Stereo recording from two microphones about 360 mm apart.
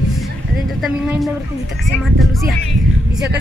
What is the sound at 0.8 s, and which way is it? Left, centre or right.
Speech, centre.